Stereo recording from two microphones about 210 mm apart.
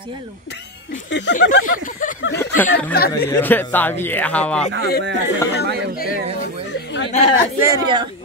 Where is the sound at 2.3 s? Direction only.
10° left (ahead or behind).